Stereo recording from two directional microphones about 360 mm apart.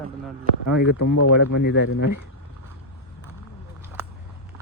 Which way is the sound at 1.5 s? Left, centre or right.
Left.